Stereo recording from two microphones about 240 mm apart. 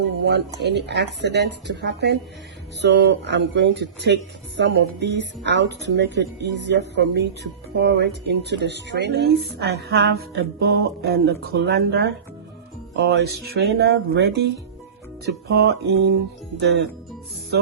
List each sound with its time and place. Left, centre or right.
0.6 s speech: right
15.4 s speech: right